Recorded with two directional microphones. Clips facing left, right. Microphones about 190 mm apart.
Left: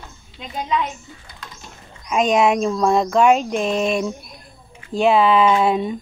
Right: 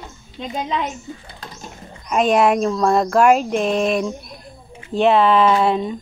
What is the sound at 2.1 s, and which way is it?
A woman's voice, 5° right (ahead or behind).